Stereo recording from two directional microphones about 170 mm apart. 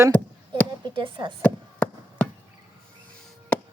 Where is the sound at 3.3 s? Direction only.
10° left (ahead or behind).